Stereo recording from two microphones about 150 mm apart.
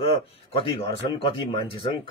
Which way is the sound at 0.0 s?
40° left (ahead or behind).